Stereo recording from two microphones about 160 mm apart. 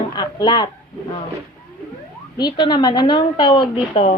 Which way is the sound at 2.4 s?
30° left (ahead or behind).